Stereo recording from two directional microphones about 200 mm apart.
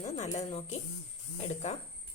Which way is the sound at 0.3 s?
30° left (ahead or behind).